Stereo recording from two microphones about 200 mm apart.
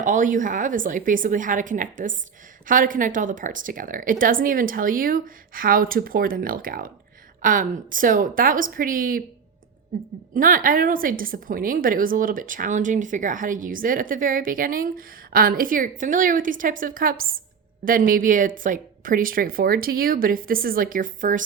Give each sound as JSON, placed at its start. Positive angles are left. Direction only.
{"t": 0.0, "sound": "a woman's voice", "side_deg": -40}